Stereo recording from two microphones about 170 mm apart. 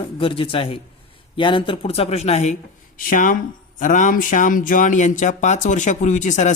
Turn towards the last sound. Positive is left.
turn(degrees=45)  # may be behind; listen again after turning